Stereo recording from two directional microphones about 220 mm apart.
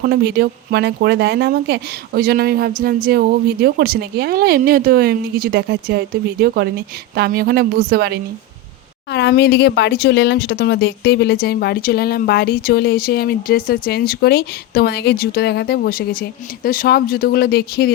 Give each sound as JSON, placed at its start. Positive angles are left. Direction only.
{"t": 0.0, "sound": "a woman's voice", "side_deg": -45}
{"t": 9.1, "sound": "speech", "side_deg": 50}